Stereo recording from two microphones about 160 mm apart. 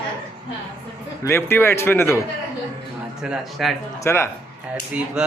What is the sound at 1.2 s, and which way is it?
Mantra, 15° left (ahead or behind).